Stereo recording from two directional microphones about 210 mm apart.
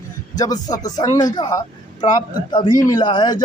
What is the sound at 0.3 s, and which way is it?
A man's voice, 20° left (ahead or behind).